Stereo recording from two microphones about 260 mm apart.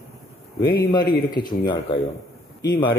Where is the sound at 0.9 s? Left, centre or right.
Centre.